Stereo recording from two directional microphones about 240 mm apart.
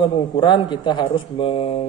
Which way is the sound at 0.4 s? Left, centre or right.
Centre.